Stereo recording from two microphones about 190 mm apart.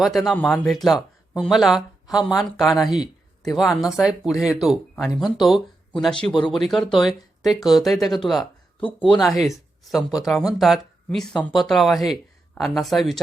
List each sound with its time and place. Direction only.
0.0 s speech: centre (ahead or behind)